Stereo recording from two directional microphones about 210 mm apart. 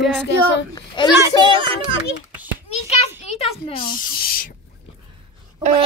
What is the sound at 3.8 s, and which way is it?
Speech, 45° left (ahead or behind).